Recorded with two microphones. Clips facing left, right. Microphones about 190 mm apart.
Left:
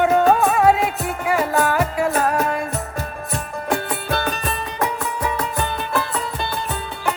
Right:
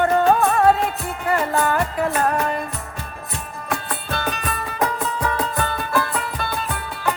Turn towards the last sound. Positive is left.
turn(degrees=20)  # may be behind; listen again after turning